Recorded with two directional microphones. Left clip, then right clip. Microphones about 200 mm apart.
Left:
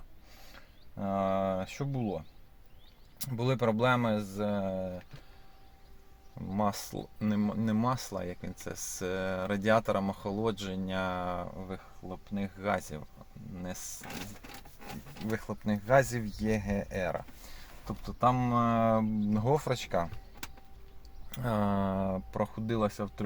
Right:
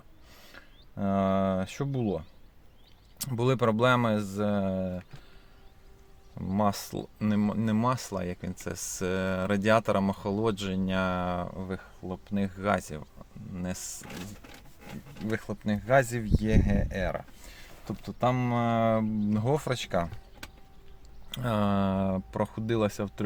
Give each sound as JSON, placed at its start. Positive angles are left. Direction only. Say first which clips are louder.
{"t": 0.3, "sound": "mechanisms", "louder": "right 4 dB", "side_deg": -40}
{"t": 3.2, "sound": "speech", "louder": "right 4 dB", "side_deg": -35}
{"t": 6.5, "sound": "speech", "louder": "right 4 dB", "side_deg": -25}
{"t": 15.3, "sound": "speech", "louder": "right 2 dB", "side_deg": -15}
{"t": 17.8, "sound": "speech", "louder": "even", "side_deg": -20}
{"t": 21.2, "sound": "speech", "louder": "right 3 dB", "side_deg": -20}